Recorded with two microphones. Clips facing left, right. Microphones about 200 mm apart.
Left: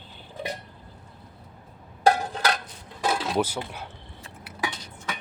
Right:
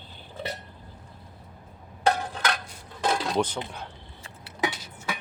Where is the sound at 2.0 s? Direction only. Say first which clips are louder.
Left 3 dB; 35° left (ahead or behind).